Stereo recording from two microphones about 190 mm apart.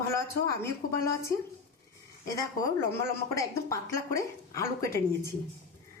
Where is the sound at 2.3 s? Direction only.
15° left (ahead or behind).